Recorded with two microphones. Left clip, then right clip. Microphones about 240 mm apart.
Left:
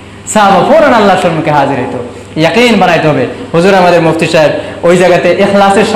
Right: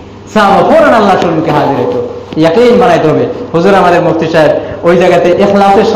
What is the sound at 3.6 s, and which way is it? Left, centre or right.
A man's voice, left.